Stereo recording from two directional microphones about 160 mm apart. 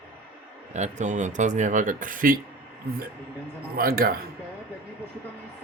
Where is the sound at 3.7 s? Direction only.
70° right (ahead or behind).